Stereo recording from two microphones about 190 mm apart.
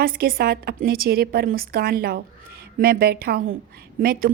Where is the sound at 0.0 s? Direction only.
50° right (ahead or behind).